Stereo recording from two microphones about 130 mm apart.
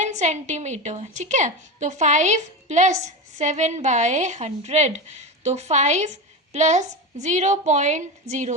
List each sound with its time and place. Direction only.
0.0 s a woman's voice: 65° right (ahead or behind)